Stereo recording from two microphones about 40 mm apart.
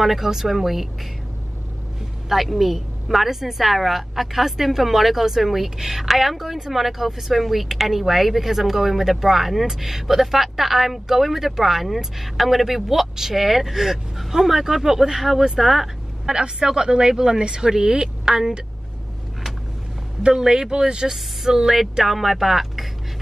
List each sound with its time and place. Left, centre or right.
0.0 s a woman's voice: centre
2.2 s a woman's voice: centre
16.3 s speech: centre
20.2 s speech: centre